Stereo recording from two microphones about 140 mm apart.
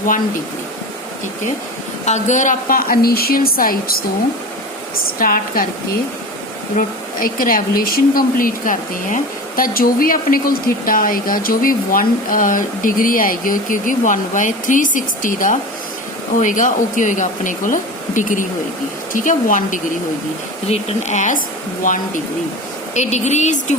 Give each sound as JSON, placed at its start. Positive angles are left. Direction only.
{"t": 2.0, "sound": "a woman's voice", "side_deg": 60}
{"t": 5.2, "sound": "a woman's voice", "side_deg": 90}
{"t": 6.7, "sound": "speech", "side_deg": 85}
{"t": 21.8, "sound": "speech", "side_deg": 75}
{"t": 23.0, "sound": "speech", "side_deg": 55}